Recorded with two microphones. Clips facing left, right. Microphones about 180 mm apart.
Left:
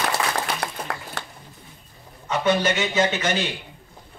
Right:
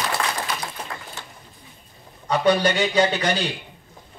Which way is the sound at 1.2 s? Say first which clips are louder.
Left 5 dB; 80° left.